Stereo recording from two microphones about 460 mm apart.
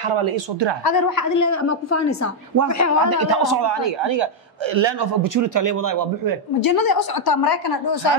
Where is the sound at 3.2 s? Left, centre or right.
Right.